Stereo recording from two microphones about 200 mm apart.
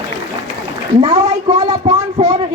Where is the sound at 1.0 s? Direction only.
25° right (ahead or behind).